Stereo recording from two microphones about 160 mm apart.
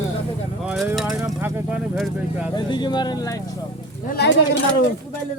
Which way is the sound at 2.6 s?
30° left (ahead or behind).